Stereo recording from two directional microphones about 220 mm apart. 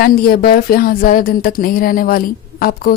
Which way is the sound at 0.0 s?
45° left (ahead or behind).